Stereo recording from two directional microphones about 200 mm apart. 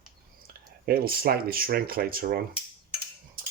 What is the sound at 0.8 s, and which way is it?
Speech, 50° right (ahead or behind).